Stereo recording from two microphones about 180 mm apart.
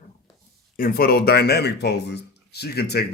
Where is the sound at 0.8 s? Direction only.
55° left (ahead or behind).